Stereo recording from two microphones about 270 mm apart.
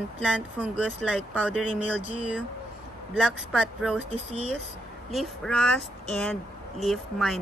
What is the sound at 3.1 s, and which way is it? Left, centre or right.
Speech, centre.